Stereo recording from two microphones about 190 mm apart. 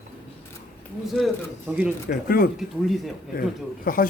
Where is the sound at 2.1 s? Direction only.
50° left (ahead or behind).